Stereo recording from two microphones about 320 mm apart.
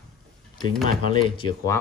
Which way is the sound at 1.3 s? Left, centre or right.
Centre.